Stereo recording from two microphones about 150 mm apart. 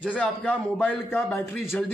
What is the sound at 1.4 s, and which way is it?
Speech, centre (ahead or behind).